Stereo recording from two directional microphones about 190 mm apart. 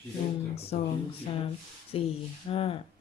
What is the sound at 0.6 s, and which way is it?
Speech, 30° left (ahead or behind).